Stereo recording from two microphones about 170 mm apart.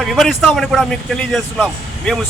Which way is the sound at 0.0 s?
Centre (ahead or behind).